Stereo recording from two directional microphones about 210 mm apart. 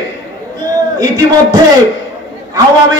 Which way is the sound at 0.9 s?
20° right (ahead or behind).